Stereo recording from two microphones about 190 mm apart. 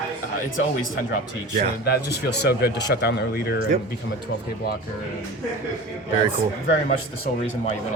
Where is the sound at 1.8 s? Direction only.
60° left (ahead or behind).